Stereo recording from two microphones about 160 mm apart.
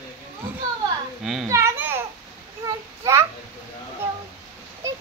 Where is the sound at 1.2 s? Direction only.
Centre (ahead or behind).